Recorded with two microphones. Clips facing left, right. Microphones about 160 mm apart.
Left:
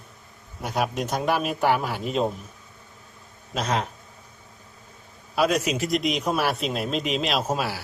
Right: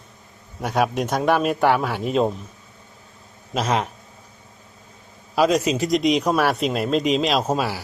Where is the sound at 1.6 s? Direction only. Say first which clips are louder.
Right 4 dB; 70° right (ahead or behind).